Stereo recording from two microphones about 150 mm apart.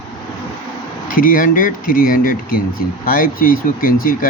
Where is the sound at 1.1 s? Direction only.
70° left (ahead or behind).